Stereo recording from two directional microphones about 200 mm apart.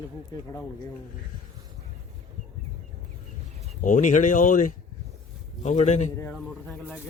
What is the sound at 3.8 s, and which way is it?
Speech, 40° left (ahead or behind).